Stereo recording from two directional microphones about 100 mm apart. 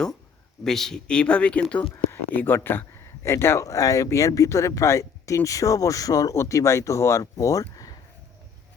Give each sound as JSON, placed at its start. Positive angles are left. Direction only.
{"t": 0.6, "sound": "speech", "side_deg": 5}